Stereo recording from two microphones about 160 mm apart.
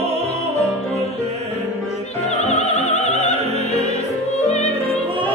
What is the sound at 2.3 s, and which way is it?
Music, 45° left (ahead or behind).